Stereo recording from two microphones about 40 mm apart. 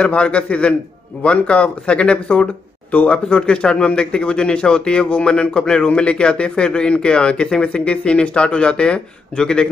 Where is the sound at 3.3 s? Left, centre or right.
Left.